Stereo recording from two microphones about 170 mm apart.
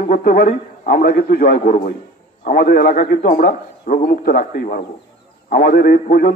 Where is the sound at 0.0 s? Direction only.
55° left (ahead or behind).